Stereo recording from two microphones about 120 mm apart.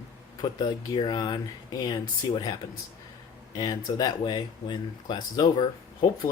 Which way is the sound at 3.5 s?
35° left (ahead or behind).